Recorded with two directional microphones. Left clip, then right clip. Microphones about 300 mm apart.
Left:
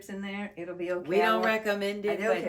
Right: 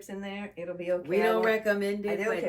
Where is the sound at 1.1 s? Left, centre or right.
Centre.